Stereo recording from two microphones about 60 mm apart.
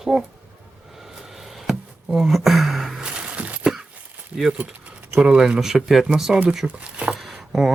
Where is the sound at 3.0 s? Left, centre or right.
Centre.